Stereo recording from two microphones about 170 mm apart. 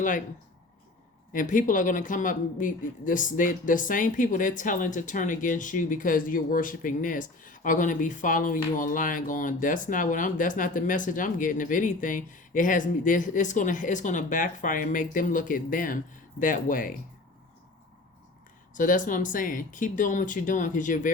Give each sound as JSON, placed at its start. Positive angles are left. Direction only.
{"t": 1.3, "sound": "speech", "side_deg": 50}
{"t": 18.7, "sound": "speech", "side_deg": 50}